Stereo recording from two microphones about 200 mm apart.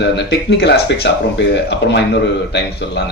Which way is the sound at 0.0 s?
60° left (ahead or behind).